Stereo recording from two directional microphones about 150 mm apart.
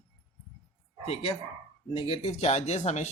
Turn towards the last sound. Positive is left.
turn(degrees=50)  # may be behind; listen again after turning